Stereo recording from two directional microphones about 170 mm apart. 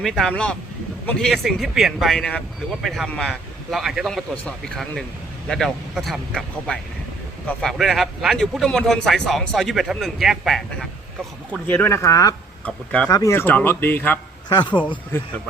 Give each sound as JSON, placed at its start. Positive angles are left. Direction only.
{"t": 0.0, "sound": "a man's voice", "side_deg": 0}
{"t": 11.7, "sound": "speech", "side_deg": 15}
{"t": 12.6, "sound": "speech", "side_deg": 5}
{"t": 13.1, "sound": "speech", "side_deg": 20}